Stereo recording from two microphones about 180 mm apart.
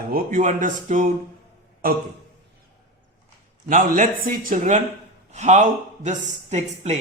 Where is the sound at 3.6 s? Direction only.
45° right (ahead or behind).